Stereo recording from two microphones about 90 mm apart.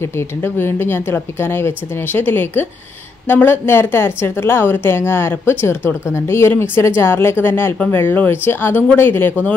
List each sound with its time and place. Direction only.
0.4 s a woman's voice: 25° left (ahead or behind)